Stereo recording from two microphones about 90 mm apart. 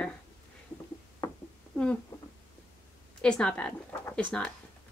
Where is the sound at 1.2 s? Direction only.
35° left (ahead or behind).